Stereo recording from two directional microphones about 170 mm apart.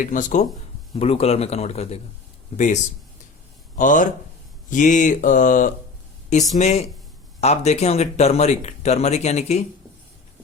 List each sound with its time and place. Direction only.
0.0 s speech: 50° left (ahead or behind)
0.9 s speech: 35° left (ahead or behind)
3.8 s speech: 50° left (ahead or behind)